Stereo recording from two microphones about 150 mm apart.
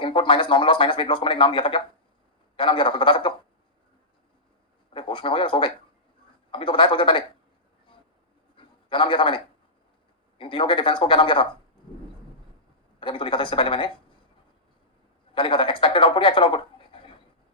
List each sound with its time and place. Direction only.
0.0 s speech: 35° left (ahead or behind)
4.9 s speech: 35° left (ahead or behind)
8.5 s a sound: 35° left (ahead or behind)
10.3 s speech: 35° left (ahead or behind)
13.0 s speech: 35° left (ahead or behind)
15.4 s speech: 35° left (ahead or behind)